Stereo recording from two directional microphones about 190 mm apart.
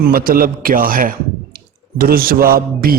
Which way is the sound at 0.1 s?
50° right (ahead or behind).